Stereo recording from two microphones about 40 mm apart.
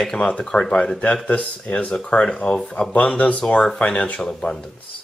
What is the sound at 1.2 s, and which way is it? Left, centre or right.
Speech, left.